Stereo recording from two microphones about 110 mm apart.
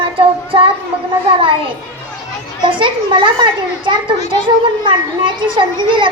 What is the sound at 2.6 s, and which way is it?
A child's voice, 50° right (ahead or behind).